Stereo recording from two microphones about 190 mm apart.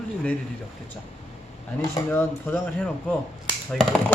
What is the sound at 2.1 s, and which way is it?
Speech, 10° left (ahead or behind).